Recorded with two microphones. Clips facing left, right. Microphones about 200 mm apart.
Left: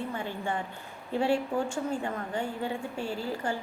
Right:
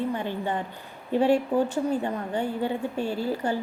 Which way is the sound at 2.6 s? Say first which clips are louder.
Right 5 dB; 40° right (ahead or behind).